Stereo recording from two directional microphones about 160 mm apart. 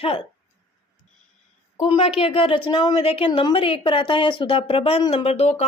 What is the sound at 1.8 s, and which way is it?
A woman's voice, 35° left (ahead or behind).